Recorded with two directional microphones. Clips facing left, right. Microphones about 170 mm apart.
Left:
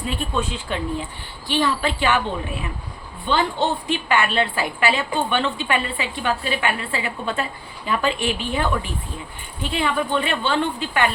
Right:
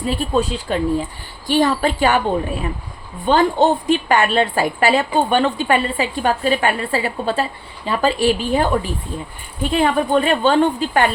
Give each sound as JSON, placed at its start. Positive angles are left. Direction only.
{"t": 0.1, "sound": "a woman's voice", "side_deg": -35}